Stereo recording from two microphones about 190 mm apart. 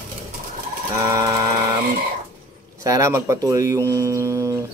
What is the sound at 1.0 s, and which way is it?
Speech, 15° right (ahead or behind).